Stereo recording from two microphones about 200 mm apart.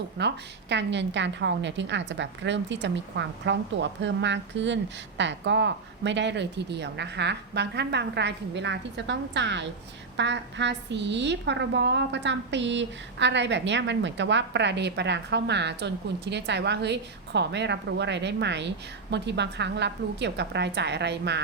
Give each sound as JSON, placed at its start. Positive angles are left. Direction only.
{"t": 0.2, "sound": "a woman's voice", "side_deg": -60}